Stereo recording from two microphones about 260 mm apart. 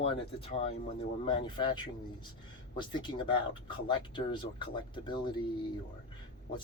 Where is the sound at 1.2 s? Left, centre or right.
Centre.